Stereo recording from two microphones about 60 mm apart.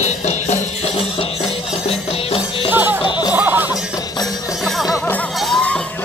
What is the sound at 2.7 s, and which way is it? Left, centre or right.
Music, right.